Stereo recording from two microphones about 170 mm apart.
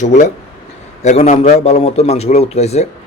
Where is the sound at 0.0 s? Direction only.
45° left (ahead or behind).